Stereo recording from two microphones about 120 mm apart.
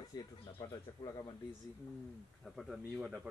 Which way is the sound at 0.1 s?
35° left (ahead or behind).